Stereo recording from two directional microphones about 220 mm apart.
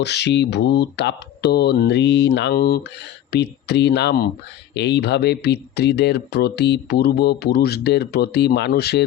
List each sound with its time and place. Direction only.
0.0 s speech: 50° left (ahead or behind)